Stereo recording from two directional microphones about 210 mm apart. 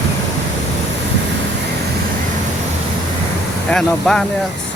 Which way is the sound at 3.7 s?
5° left (ahead or behind).